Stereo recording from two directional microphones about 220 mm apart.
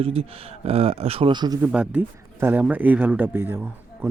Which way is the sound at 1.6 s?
5° right (ahead or behind).